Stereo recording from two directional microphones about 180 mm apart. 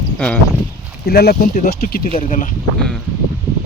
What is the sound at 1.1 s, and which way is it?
A man's voice, 60° left (ahead or behind).